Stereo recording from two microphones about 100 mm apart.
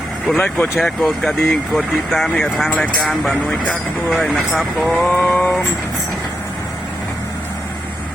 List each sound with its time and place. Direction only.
0.3 s speech: 15° left (ahead or behind)
0.8 s speech: 5° left (ahead or behind)
4.1 s speech: centre (ahead or behind)
5.1 s speech: 15° left (ahead or behind)